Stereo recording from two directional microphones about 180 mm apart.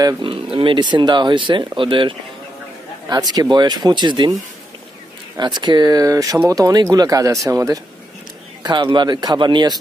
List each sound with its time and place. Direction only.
0.0 s speech: 25° right (ahead or behind)
5.4 s speech: 25° right (ahead or behind)